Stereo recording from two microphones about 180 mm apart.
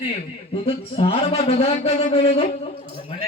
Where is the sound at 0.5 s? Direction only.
30° left (ahead or behind).